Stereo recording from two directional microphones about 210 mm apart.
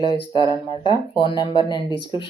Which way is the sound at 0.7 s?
20° left (ahead or behind).